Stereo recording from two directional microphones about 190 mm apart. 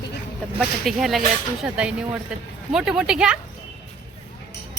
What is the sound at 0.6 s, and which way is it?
Speech, centre (ahead or behind).